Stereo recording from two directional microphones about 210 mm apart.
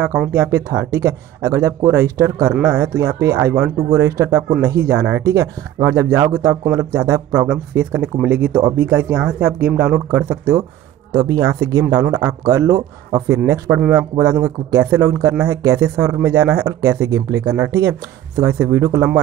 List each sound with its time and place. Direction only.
0.3 s speech: 10° right (ahead or behind)